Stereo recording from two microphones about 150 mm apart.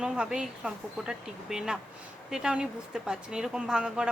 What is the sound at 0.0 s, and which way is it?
A woman's voice, 5° right (ahead or behind).